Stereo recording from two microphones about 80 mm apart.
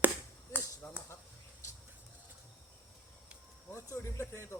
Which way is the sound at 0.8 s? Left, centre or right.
Left.